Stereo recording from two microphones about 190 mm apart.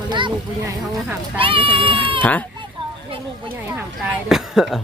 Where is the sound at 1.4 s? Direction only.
30° right (ahead or behind).